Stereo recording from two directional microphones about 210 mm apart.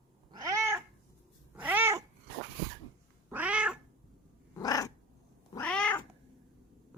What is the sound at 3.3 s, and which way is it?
Cat, 5° right (ahead or behind).